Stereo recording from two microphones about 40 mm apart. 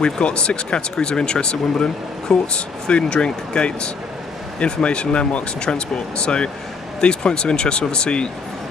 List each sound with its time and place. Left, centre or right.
0.0 s speech: left